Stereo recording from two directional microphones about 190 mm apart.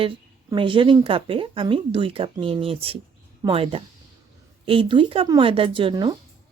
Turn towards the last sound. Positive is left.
turn(degrees=-25)  # may be behind; listen again after turning